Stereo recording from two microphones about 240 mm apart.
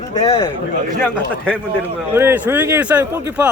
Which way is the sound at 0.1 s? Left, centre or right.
Centre.